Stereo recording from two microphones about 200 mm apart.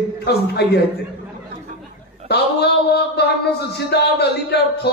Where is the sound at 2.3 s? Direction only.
55° left (ahead or behind).